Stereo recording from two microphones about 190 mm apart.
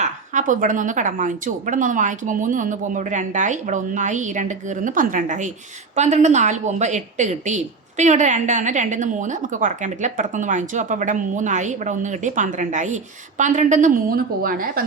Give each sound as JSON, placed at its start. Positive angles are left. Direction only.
{"t": 0.0, "sound": "a woman's voice", "side_deg": -40}